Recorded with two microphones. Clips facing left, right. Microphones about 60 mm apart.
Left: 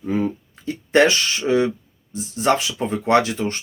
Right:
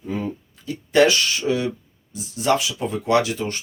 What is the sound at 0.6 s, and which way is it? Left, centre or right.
Speech, left.